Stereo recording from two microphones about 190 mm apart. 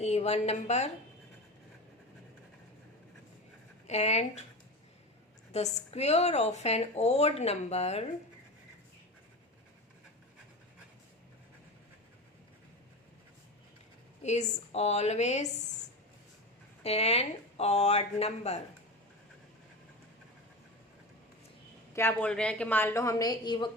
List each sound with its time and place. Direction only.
0.0 s speech: 35° left (ahead or behind)
3.8 s speech: 35° left (ahead or behind)
5.5 s speech: 35° left (ahead or behind)
14.2 s speech: 35° left (ahead or behind)
16.8 s speech: 35° left (ahead or behind)
21.9 s a woman's voice: 10° left (ahead or behind)